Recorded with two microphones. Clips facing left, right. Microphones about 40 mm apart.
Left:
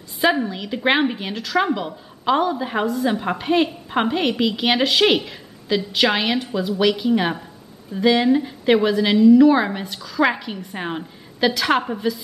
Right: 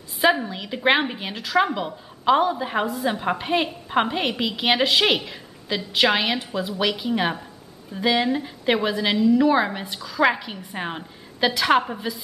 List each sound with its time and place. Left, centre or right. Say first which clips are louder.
0.2 s speech: left 1 dB; centre